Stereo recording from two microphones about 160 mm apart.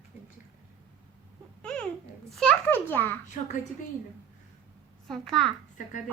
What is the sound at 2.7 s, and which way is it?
Speech, 15° left (ahead or behind).